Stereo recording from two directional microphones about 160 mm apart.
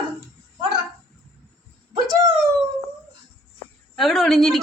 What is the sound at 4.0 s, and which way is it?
Speech, centre (ahead or behind).